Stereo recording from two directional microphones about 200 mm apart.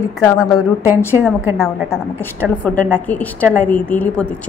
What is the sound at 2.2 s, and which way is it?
A woman's voice, 10° left (ahead or behind).